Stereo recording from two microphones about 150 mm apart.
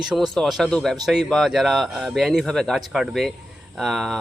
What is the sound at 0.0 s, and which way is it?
Speech, centre (ahead or behind).